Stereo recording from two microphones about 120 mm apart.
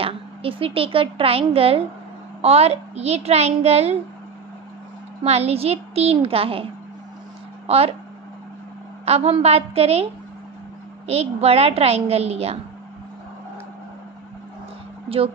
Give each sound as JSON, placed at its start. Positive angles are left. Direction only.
{"t": 0.0, "sound": "a child's voice", "side_deg": -50}
{"t": 5.2, "sound": "a child's voice", "side_deg": -60}
{"t": 9.0, "sound": "a child's voice", "side_deg": -60}
{"t": 11.1, "sound": "a child's voice", "side_deg": -60}
{"t": 15.0, "sound": "speech", "side_deg": -50}